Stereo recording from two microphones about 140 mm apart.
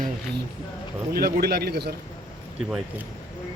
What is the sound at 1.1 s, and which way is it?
Speech, 90° right.